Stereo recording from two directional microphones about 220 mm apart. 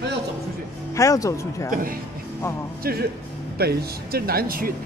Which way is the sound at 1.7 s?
40° right (ahead or behind).